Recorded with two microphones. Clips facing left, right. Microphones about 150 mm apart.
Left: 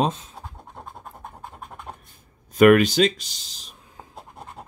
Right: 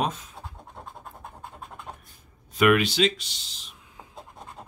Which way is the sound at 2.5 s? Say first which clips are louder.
Left 7 dB; 45° left (ahead or behind).